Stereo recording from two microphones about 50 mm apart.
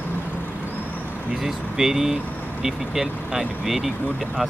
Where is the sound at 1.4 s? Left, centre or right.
Centre.